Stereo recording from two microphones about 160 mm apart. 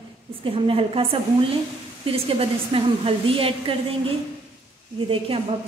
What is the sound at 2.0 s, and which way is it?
A woman's voice, 35° right (ahead or behind).